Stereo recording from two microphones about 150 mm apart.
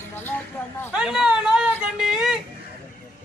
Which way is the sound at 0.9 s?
5° right (ahead or behind).